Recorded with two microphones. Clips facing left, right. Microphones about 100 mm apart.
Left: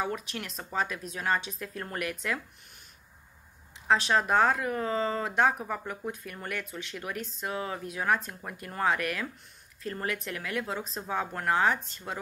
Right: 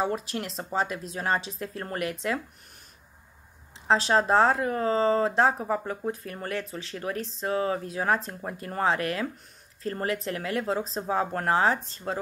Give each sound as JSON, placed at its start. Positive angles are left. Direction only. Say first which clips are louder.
{"t": 0.0, "sound": "speech", "louder": "right 5 dB", "side_deg": -35}
{"t": 3.8, "sound": "speech", "louder": "right 3 dB", "side_deg": -30}